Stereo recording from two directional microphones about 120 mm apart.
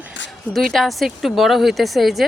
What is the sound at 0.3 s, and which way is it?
A woman's voice, centre (ahead or behind).